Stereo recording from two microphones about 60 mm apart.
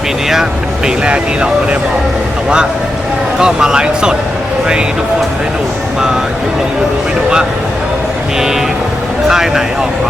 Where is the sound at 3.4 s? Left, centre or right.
Centre.